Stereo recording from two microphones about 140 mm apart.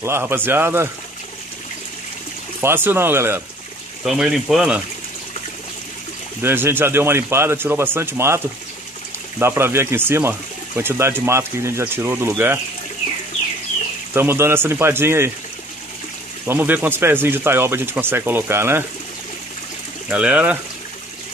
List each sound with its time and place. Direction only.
0.0 s speech: 15° right (ahead or behind)
2.6 s speech: 15° right (ahead or behind)
4.0 s speech: centre (ahead or behind)
6.4 s speech: 15° right (ahead or behind)
9.4 s speech: 20° right (ahead or behind)
14.1 s speech: 15° right (ahead or behind)
16.4 s speech: 15° right (ahead or behind)
20.1 s speech: 10° right (ahead or behind)